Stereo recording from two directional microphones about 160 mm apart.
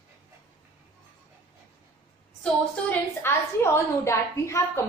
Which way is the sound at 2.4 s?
15° left (ahead or behind).